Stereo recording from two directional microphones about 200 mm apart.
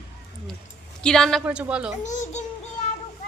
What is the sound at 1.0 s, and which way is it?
Speech, 5° left (ahead or behind).